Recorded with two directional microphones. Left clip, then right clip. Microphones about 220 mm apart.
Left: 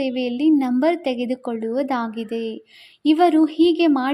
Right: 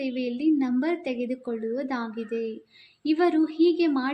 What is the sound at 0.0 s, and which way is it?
A woman's voice, 40° left (ahead or behind).